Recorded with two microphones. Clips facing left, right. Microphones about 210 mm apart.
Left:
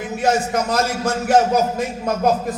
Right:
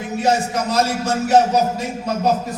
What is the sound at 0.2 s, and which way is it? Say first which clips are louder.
A man's voice: even; 55° left (ahead or behind).